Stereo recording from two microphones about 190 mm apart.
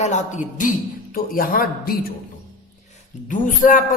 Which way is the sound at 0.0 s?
40° left (ahead or behind).